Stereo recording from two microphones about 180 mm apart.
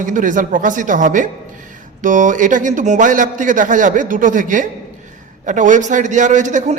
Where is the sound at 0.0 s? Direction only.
45° right (ahead or behind).